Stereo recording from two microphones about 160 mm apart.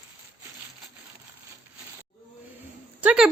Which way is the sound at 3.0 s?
10° right (ahead or behind).